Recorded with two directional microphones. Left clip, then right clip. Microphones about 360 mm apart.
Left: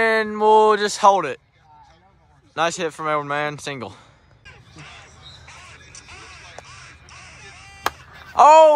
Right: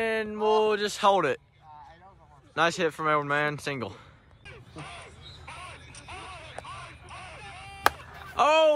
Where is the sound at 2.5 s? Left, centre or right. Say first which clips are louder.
Left 3 dB; centre.